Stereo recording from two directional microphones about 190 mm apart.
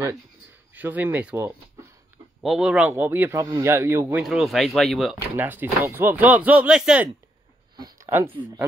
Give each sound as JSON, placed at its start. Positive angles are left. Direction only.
{"t": 0.7, "sound": "a man's voice", "side_deg": -10}
{"t": 4.2, "sound": "speech", "side_deg": 0}
{"t": 5.3, "sound": "a man's voice", "side_deg": -10}
{"t": 7.7, "sound": "a sound", "side_deg": -20}